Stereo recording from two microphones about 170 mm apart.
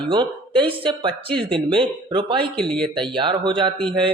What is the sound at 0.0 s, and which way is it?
Speech, 30° right (ahead or behind).